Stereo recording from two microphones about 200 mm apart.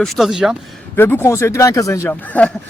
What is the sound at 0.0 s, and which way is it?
Speech, centre (ahead or behind).